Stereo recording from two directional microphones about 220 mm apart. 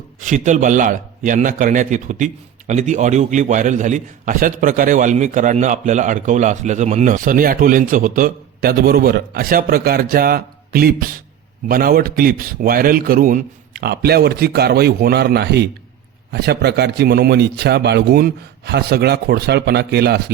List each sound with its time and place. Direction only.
0.2 s a man's voice: 35° right (ahead or behind)